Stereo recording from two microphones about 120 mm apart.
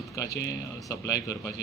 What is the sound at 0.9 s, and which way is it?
Speech, 25° left (ahead or behind).